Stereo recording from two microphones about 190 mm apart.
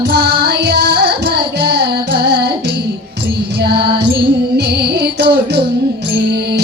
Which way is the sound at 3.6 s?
55° right (ahead or behind).